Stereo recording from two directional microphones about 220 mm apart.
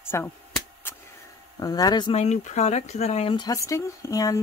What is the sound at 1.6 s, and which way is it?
Speech, 15° left (ahead or behind).